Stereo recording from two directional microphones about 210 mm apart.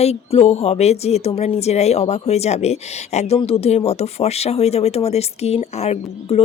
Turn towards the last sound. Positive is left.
turn(degrees=30)  # may be behind; listen again after turning